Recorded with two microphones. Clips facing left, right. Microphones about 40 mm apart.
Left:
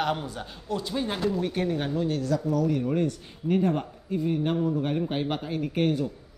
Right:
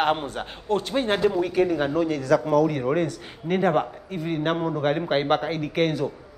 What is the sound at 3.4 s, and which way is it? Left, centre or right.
A man's voice, right.